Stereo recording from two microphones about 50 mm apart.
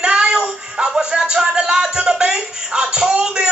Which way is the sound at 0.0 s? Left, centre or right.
Centre.